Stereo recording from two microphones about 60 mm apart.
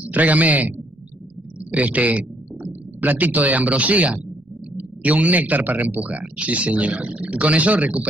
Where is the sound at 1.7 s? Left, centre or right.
Right.